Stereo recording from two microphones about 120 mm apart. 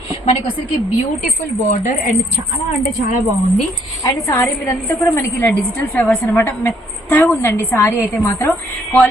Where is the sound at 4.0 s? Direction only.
25° left (ahead or behind).